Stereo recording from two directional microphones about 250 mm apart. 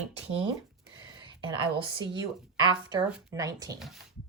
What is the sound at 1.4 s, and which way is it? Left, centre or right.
Speech, centre.